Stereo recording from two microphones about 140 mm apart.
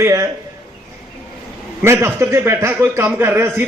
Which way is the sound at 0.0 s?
20° right (ahead or behind).